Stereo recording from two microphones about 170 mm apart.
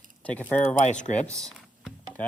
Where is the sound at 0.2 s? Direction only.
10° left (ahead or behind).